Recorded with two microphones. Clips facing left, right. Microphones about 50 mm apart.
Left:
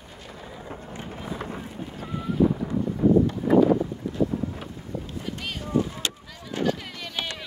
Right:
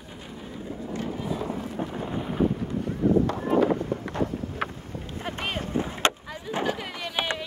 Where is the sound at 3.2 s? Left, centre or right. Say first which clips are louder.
Left 3 dB; right.